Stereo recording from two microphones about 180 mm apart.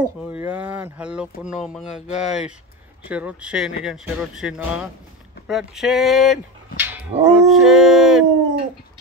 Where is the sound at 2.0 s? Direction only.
40° left (ahead or behind).